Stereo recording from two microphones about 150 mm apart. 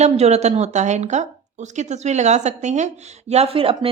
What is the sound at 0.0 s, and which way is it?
A woman's voice, 45° right (ahead or behind).